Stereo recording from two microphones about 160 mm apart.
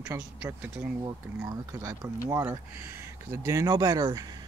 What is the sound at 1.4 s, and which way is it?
A man's voice, 20° right (ahead or behind).